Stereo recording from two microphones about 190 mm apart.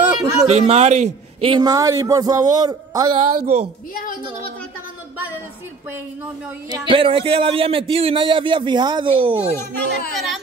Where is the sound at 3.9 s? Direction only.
45° left (ahead or behind).